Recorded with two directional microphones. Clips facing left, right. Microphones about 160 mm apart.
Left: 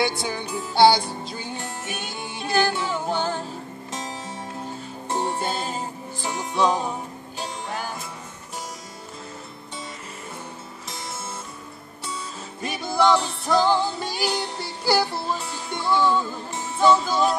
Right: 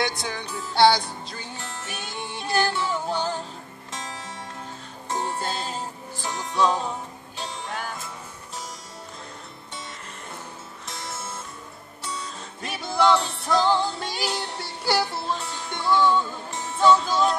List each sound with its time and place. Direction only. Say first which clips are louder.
0.0 s music: left 3 dB; 5° left (ahead or behind)
3.9 s music: left 3 dB; 20° left (ahead or behind)
5.4 s music: left 2 dB; 5° left (ahead or behind)
12.6 s music: left 1 dB; centre (ahead or behind)